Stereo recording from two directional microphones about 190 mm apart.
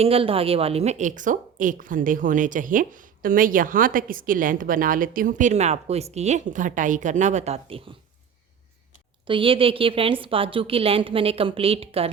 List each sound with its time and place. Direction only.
0.0 s a woman's voice: 30° right (ahead or behind)
9.2 s a woman's voice: 25° right (ahead or behind)